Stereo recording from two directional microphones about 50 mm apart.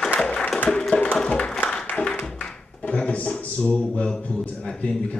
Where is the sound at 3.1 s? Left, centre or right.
Left.